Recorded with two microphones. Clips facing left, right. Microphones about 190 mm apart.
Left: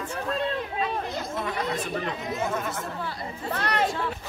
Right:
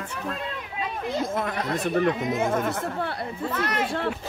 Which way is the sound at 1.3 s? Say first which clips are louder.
Right 2 dB; 50° right (ahead or behind).